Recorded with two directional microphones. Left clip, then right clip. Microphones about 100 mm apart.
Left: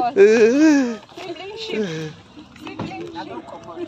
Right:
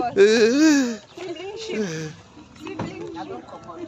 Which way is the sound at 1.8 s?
10° left (ahead or behind).